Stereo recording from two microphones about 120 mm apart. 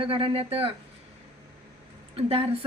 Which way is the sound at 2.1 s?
55° right (ahead or behind).